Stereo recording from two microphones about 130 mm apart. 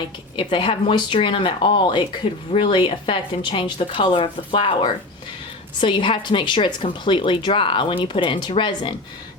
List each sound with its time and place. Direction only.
0.3 s speech: 40° left (ahead or behind)